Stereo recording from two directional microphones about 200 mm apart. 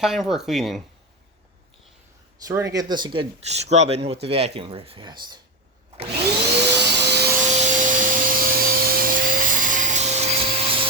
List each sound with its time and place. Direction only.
0.0 s speech: centre (ahead or behind)
2.4 s speech: 15° right (ahead or behind)
6.6 s vacuum cleaner: 55° right (ahead or behind)
7.4 s vacuum cleaner: 35° right (ahead or behind)